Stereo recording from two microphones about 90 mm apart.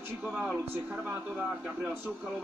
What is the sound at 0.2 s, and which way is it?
Speech, 15° right (ahead or behind).